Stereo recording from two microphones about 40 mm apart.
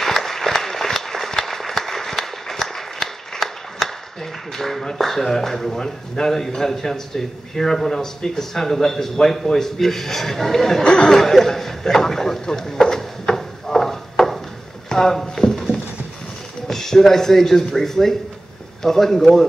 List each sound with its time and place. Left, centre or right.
0.0 s applause: centre
4.6 s speech: centre
10.8 s speech: left
11.1 s a sound: centre
14.9 s speech: centre
16.6 s speech: centre